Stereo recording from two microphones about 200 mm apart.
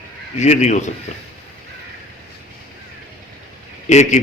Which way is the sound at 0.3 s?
35° left (ahead or behind).